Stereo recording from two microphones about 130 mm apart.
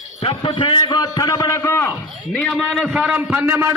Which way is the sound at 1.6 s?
20° left (ahead or behind).